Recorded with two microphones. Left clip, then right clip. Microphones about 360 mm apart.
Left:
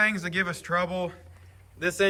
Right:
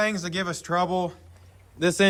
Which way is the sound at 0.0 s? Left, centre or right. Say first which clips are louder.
Left 1 dB; centre.